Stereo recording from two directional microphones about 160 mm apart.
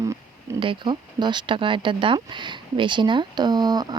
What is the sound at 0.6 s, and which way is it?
Speech, 30° right (ahead or behind).